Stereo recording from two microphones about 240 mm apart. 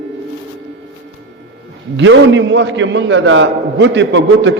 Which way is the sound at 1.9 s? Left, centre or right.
Right.